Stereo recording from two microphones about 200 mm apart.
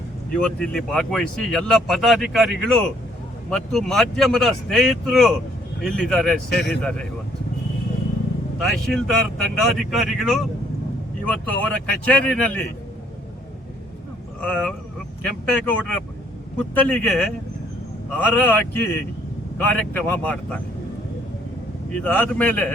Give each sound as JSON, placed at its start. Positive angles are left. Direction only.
{"t": 0.3, "sound": "speech", "side_deg": 5}
{"t": 8.5, "sound": "speech", "side_deg": 0}
{"t": 14.4, "sound": "speech", "side_deg": 5}
{"t": 21.9, "sound": "speech", "side_deg": 5}